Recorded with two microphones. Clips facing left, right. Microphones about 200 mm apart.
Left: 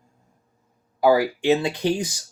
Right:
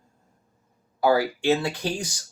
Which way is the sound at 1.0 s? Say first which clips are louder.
Left 3 dB; 15° left (ahead or behind).